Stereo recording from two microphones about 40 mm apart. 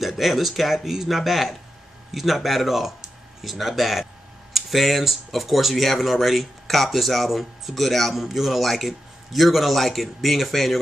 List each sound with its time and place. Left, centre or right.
0.0 s speech: centre